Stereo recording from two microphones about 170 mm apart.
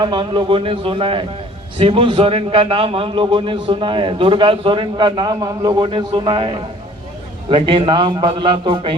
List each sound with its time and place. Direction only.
0.0 s a man's voice: 25° right (ahead or behind)